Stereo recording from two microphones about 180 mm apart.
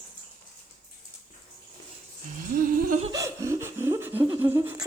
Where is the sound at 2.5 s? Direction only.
50° right (ahead or behind).